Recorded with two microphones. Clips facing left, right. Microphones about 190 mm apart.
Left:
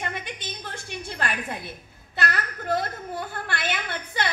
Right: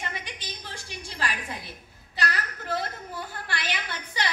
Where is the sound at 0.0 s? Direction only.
55° left (ahead or behind).